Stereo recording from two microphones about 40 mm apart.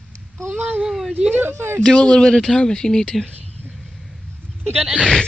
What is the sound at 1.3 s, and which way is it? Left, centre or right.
Speech, right.